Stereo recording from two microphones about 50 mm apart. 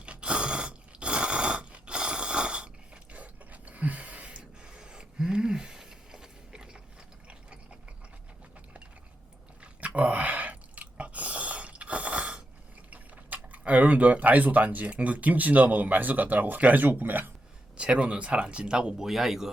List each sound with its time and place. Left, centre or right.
0.0 s a sound: right
9.6 s chewing: right
12.9 s speech: right
17.7 s speech: right
19.0 s speech: centre